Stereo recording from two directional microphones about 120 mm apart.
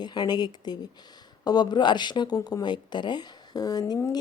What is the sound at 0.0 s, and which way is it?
Speech, 35° left (ahead or behind).